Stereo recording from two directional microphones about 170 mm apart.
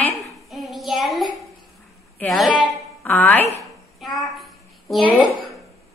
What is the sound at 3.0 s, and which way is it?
Speech, 10° left (ahead or behind).